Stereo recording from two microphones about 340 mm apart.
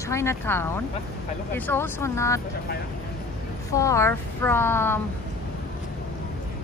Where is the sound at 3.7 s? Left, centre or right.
Centre.